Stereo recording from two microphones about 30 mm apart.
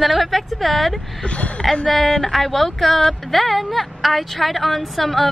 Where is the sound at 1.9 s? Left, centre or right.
Centre.